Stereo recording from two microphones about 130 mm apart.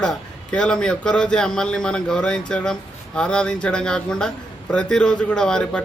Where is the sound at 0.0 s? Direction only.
5° left (ahead or behind).